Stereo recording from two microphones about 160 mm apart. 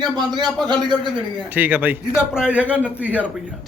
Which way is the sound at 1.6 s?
10° right (ahead or behind).